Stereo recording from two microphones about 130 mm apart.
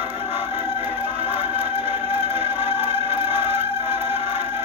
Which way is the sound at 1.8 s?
15° right (ahead or behind).